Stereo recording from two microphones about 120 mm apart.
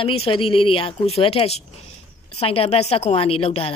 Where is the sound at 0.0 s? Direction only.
50° left (ahead or behind).